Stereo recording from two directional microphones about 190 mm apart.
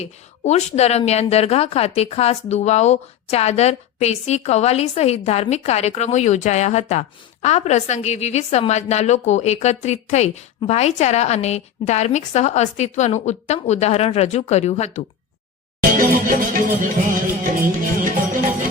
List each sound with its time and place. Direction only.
0.0 s a woman's voice: 35° left (ahead or behind)
15.8 s music: 45° right (ahead or behind)